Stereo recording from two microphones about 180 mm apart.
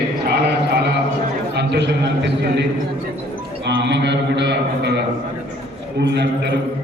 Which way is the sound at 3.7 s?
75° right (ahead or behind).